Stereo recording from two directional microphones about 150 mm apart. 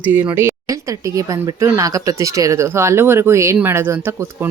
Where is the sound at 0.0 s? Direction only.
10° right (ahead or behind).